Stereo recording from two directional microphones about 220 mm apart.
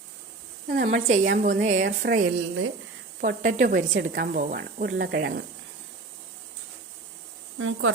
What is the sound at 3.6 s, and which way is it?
Speech, 40° right (ahead or behind).